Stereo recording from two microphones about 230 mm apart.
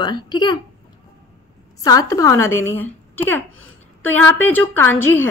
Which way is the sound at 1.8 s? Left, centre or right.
Centre.